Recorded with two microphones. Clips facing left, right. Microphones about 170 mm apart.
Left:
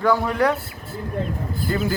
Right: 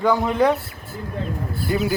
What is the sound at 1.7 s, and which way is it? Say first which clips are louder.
Speech: right 2 dB; 15° right (ahead or behind).